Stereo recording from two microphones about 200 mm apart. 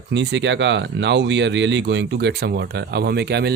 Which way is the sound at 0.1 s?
60° right (ahead or behind).